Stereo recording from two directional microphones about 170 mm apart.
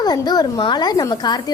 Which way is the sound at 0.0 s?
25° left (ahead or behind).